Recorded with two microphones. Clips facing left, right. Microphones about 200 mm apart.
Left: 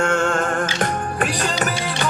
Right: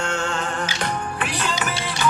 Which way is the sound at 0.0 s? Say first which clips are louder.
Left 6 dB; 50° left (ahead or behind).